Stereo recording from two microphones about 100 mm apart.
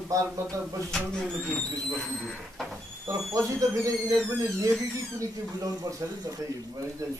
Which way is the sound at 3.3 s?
35° right (ahead or behind).